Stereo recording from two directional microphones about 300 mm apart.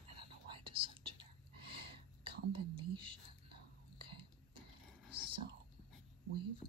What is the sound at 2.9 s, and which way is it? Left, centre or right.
Whispering, centre.